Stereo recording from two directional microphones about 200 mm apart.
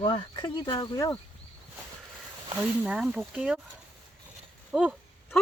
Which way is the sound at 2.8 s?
5° right (ahead or behind).